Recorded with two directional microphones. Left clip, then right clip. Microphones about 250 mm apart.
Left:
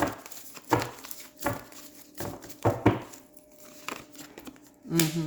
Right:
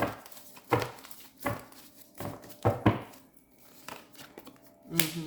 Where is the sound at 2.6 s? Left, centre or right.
Left.